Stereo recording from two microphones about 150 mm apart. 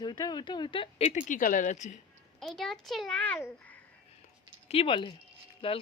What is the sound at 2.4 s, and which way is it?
A child's voice, centre (ahead or behind).